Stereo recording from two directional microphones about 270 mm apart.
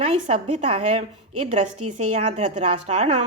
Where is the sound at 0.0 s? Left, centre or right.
Right.